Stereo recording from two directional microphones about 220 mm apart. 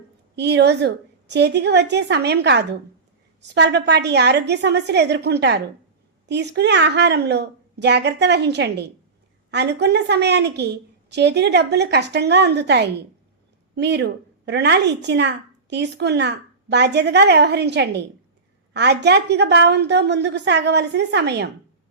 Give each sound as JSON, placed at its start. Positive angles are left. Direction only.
{"t": 0.3, "sound": "a woman's voice", "side_deg": -50}